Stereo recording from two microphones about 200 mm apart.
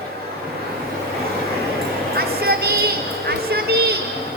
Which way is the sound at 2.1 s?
50° right (ahead or behind).